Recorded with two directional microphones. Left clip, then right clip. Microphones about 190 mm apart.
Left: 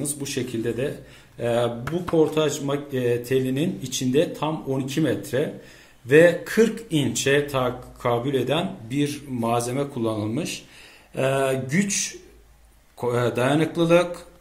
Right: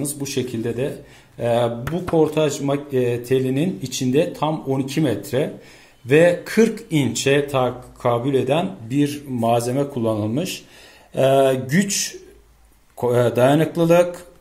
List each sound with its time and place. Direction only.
0.0 s speech: 50° right (ahead or behind)